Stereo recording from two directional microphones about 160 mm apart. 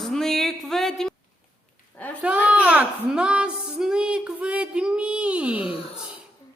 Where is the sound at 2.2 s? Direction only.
10° right (ahead or behind).